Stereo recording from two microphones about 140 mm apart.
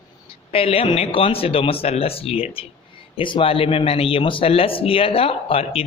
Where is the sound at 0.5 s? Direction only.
40° left (ahead or behind).